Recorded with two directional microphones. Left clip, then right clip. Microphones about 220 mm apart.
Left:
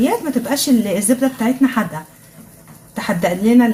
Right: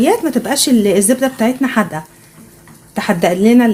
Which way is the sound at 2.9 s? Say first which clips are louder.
Right 4 dB; 30° right (ahead or behind).